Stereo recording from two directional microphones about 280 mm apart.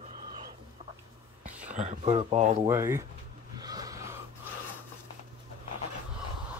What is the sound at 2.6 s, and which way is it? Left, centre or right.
Speech, centre.